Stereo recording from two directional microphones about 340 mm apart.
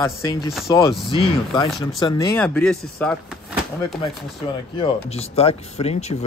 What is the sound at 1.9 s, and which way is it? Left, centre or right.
Speech, centre.